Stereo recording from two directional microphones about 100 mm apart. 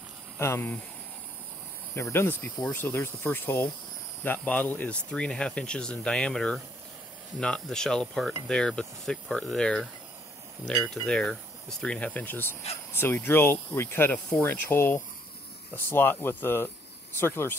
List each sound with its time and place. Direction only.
0.4 s speech: 25° left (ahead or behind)
2.0 s speech: 25° left (ahead or behind)
4.2 s cricket: 20° left (ahead or behind)
11.0 s mechanisms: 5° left (ahead or behind)
11.8 s cricket: 10° left (ahead or behind)
12.9 s speech: 20° left (ahead or behind)